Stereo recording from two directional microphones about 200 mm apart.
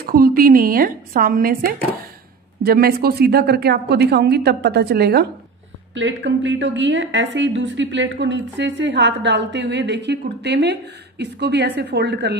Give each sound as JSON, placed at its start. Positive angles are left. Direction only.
{"t": 0.0, "sound": "a woman's voice", "side_deg": -50}
{"t": 5.9, "sound": "a woman's voice", "side_deg": -65}